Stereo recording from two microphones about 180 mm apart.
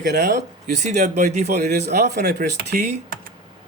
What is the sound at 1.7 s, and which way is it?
Speech, 65° right (ahead or behind).